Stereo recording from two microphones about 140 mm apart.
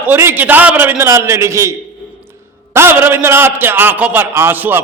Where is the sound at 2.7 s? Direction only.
15° right (ahead or behind).